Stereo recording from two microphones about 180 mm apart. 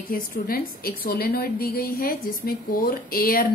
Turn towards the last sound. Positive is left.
turn(degrees=55)  # may be behind; listen again after turning